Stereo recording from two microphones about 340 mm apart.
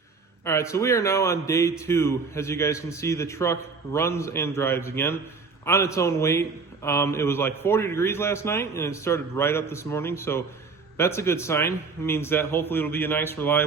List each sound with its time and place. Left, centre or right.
0.4 s a man's voice: centre